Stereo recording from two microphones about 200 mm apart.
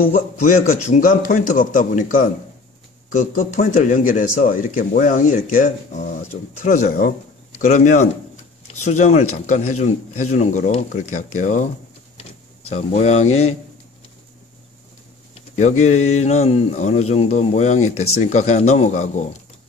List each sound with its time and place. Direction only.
0.0 s a man's voice: 45° left (ahead or behind)
15.3 s a sound: 35° left (ahead or behind)
15.8 s a man's voice: 35° left (ahead or behind)